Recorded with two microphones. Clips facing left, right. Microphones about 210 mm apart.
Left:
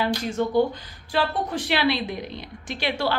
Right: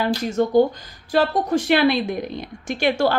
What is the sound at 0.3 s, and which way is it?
A woman's voice, 40° right (ahead or behind).